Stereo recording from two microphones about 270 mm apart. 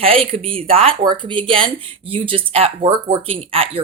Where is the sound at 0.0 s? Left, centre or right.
Right.